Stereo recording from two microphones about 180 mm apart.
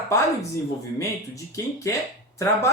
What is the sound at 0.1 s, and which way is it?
Speech, 15° left (ahead or behind).